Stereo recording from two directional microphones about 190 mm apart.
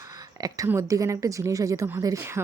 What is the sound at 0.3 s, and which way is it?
Speech, 20° right (ahead or behind).